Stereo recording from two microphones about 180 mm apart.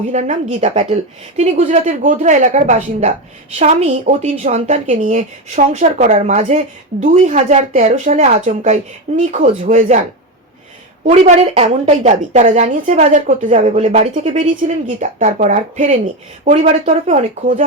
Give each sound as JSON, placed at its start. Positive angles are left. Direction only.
{"t": 0.1, "sound": "speech", "side_deg": -40}
{"t": 11.0, "sound": "a woman's voice", "side_deg": -40}